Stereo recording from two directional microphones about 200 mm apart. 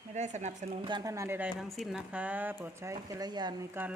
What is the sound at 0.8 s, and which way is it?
Speech, 20° right (ahead or behind).